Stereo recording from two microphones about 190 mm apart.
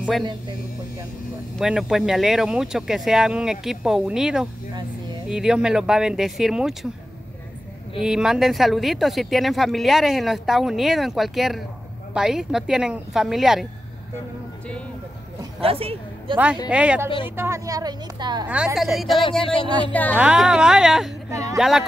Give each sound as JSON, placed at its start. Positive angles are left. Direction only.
{"t": 0.2, "sound": "speech", "side_deg": -25}
{"t": 1.6, "sound": "speech", "side_deg": 0}
{"t": 8.0, "sound": "speech", "side_deg": -5}
{"t": 15.6, "sound": "speech", "side_deg": -30}
{"t": 16.6, "sound": "speech", "side_deg": -5}
{"t": 18.8, "sound": "speech", "side_deg": 0}
{"t": 19.4, "sound": "speech", "side_deg": 30}
{"t": 19.9, "sound": "speech", "side_deg": 10}
{"t": 20.2, "sound": "speech", "side_deg": -5}
{"t": 21.3, "sound": "speech", "side_deg": -15}
{"t": 21.5, "sound": "speech", "side_deg": 0}